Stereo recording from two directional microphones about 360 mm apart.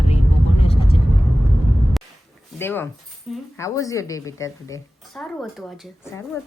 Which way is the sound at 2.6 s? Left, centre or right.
Centre.